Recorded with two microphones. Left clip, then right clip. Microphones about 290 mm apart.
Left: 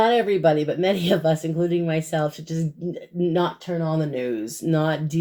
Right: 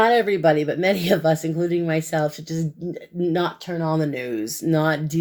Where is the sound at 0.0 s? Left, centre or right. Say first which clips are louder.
Right 1 dB; right.